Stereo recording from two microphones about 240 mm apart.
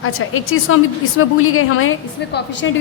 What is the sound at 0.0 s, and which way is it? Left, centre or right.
A woman's voice, left.